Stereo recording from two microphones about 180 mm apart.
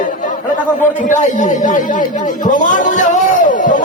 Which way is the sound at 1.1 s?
45° left (ahead or behind).